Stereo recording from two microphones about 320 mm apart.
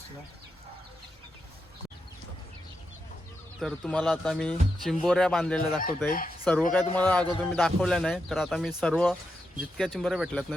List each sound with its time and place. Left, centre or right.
3.6 s speech: centre
6.1 s chicken: left
6.4 s speech: centre